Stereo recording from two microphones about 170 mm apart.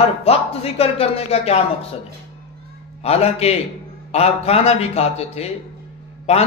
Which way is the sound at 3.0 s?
35° left (ahead or behind).